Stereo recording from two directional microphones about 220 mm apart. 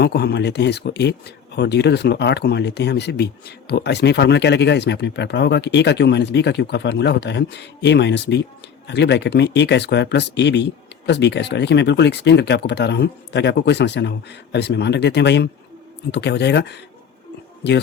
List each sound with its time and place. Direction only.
0.0 s speech: 50° left (ahead or behind)